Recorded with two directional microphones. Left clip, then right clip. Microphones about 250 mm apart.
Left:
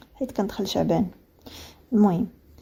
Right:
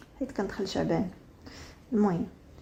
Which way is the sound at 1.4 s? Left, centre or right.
Left.